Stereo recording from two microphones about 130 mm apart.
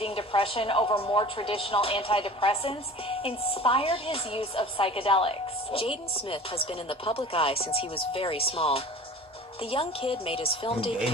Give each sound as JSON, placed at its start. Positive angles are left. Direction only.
{"t": 0.0, "sound": "speech", "side_deg": 45}